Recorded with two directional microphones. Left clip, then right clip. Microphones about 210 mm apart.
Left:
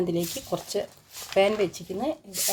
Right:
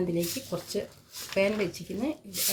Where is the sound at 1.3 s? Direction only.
40° left (ahead or behind).